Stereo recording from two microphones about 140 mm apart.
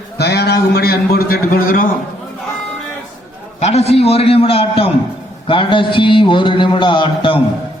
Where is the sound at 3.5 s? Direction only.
50° left (ahead or behind).